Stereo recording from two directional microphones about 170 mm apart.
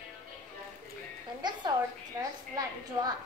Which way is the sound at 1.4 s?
25° right (ahead or behind).